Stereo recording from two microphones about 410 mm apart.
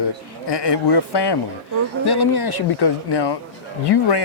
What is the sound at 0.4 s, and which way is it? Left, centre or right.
A man's voice, left.